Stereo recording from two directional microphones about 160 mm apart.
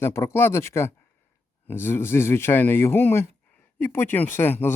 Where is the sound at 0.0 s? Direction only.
15° left (ahead or behind).